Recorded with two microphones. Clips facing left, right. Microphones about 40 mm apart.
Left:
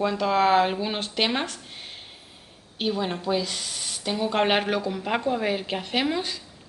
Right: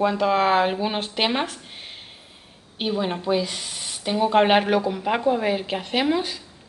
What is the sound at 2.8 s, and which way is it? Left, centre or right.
A woman's voice, centre.